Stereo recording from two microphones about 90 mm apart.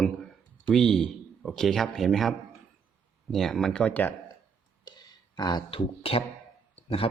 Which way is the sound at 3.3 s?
5° left (ahead or behind).